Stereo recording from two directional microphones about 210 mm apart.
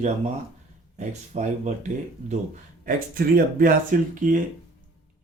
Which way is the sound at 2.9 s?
45° right (ahead or behind).